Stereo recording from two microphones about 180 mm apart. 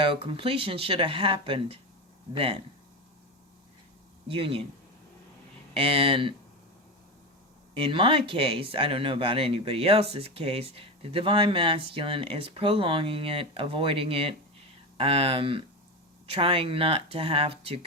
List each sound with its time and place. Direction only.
0.0 s speech: 30° right (ahead or behind)
4.3 s speech: 30° right (ahead or behind)
5.7 s speech: 30° right (ahead or behind)
7.7 s speech: 30° right (ahead or behind)